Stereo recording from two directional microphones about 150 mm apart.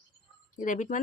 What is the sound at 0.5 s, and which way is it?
Speech, 60° left (ahead or behind).